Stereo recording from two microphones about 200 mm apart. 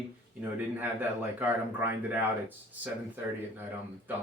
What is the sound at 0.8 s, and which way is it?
Speech, 10° right (ahead or behind).